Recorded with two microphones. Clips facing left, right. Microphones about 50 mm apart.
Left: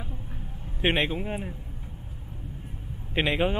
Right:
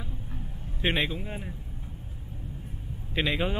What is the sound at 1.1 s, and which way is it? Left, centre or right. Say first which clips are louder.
Speech: left 5 dB; centre.